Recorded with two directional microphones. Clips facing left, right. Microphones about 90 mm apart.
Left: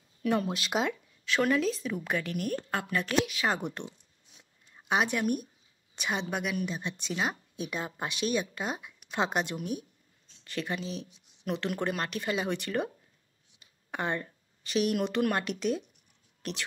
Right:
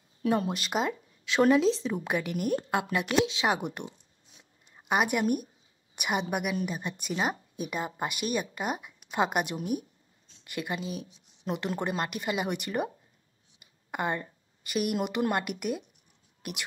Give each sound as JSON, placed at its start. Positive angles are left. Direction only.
{"t": 0.2, "sound": "speech", "side_deg": -30}
{"t": 0.7, "sound": "speech", "side_deg": -5}
{"t": 1.4, "sound": "a woman's voice", "side_deg": -25}
{"t": 13.6, "sound": "a sound", "side_deg": -10}
{"t": 15.0, "sound": "speech", "side_deg": -15}